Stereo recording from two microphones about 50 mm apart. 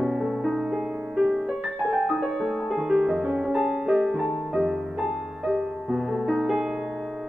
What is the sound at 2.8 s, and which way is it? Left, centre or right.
Music, centre.